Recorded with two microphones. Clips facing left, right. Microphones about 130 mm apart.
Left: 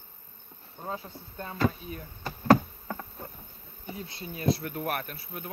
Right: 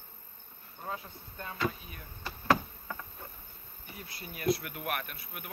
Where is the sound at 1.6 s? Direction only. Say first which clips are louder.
Left 6 dB; 45° left (ahead or behind).